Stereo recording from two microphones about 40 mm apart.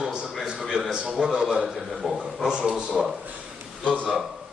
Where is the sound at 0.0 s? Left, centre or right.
Right.